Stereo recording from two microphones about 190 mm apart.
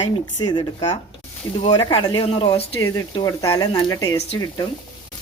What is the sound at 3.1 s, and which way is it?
Speech, 20° left (ahead or behind).